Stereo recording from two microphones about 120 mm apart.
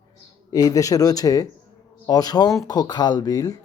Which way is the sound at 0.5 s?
30° left (ahead or behind).